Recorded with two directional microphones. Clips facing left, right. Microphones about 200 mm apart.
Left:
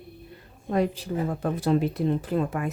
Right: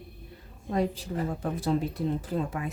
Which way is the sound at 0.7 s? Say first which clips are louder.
Left 3 dB; 70° left (ahead or behind).